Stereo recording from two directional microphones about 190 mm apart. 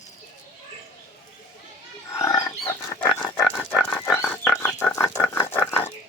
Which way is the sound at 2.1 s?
20° left (ahead or behind).